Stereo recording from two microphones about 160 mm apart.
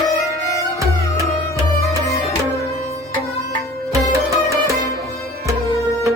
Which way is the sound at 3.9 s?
20° right (ahead or behind).